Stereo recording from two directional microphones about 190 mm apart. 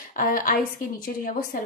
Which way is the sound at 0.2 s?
45° left (ahead or behind).